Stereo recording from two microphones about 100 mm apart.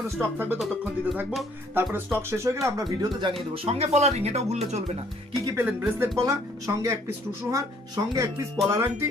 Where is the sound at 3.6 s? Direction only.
90° right.